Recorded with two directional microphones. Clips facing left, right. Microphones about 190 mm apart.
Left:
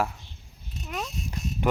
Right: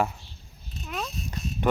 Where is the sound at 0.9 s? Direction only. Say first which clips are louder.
Even; 10° left (ahead or behind).